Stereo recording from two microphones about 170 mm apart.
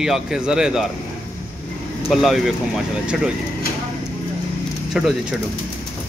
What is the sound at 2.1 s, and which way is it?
A man's voice, centre (ahead or behind).